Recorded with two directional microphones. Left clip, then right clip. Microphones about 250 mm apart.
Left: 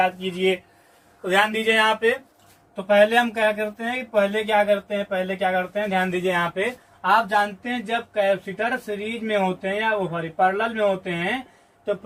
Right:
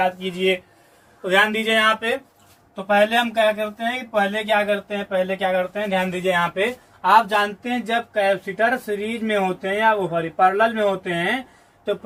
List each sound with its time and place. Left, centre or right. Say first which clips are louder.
0.0 s speech: right 1 dB; centre